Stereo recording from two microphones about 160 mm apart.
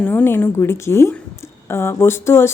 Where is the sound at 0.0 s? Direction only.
10° left (ahead or behind).